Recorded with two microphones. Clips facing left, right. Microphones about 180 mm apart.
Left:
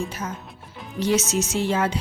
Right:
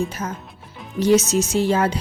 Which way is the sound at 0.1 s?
40° right (ahead or behind).